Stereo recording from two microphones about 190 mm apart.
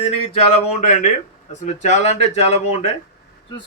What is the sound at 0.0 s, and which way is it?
Speech, 30° left (ahead or behind).